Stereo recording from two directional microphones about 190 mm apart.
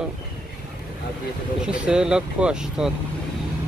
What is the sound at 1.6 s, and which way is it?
Speech, 5° right (ahead or behind).